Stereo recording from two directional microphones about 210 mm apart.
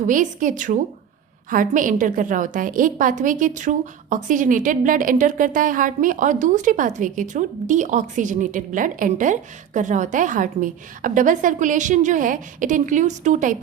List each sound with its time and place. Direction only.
0.1 s a woman's voice: 40° right (ahead or behind)